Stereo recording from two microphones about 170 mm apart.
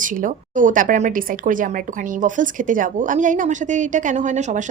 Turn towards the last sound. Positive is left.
turn(degrees=-45)  # may be behind; listen again after turning